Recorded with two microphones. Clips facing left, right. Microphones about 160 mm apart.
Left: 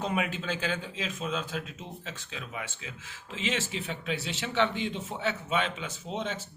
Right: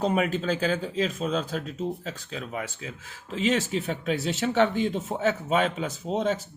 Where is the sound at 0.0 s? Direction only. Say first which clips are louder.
Right 6 dB; 40° right (ahead or behind).